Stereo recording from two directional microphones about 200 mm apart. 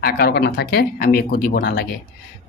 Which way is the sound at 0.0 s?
50° left (ahead or behind).